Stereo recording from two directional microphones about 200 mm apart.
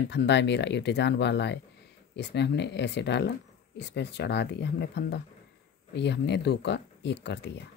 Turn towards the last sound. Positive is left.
turn(degrees=60)  # may be behind; listen again after turning